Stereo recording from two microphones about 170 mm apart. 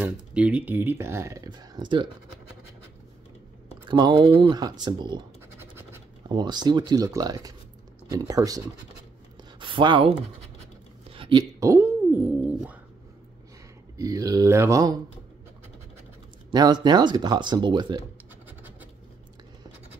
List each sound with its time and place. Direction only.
0.0 s speech: 5° right (ahead or behind); by 2.0 s 25° right (ahead or behind)
3.8 s speech: 25° right (ahead or behind)
6.2 s speech: 25° right (ahead or behind)
11.1 s a sound: 30° right (ahead or behind)
11.6 s a sound: 15° right (ahead or behind)
13.9 s speech: 20° right (ahead or behind)
16.4 s speech: 25° right (ahead or behind)